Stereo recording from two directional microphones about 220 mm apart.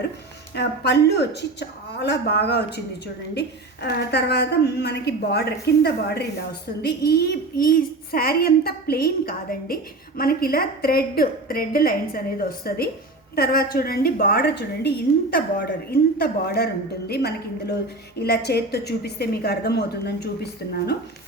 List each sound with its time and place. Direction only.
0.5 s a woman's voice: 50° left (ahead or behind)